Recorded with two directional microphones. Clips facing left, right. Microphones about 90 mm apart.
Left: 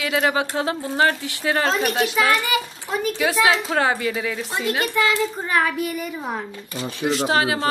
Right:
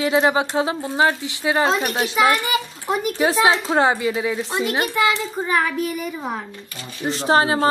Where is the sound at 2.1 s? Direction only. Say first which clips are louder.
Right 2 dB; 20° right (ahead or behind).